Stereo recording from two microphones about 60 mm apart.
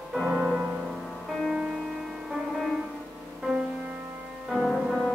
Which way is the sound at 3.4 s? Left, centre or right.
Centre.